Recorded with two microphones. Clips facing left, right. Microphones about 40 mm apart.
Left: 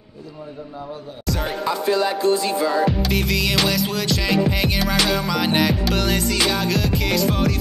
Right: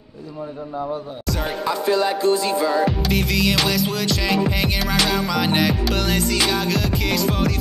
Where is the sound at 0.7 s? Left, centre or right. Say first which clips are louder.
Right 9 dB; right.